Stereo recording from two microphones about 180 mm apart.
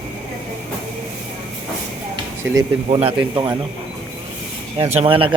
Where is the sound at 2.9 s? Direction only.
30° right (ahead or behind).